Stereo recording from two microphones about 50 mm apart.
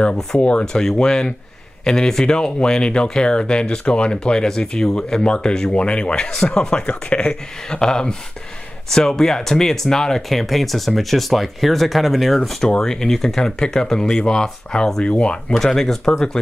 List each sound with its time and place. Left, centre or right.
0.4 s speech: left
15.5 s speech: centre